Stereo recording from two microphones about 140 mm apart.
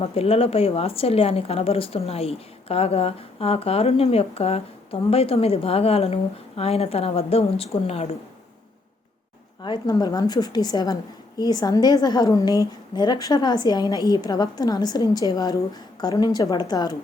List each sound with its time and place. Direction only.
0.0 s speech: 45° left (ahead or behind)
9.6 s a woman's voice: 30° left (ahead or behind)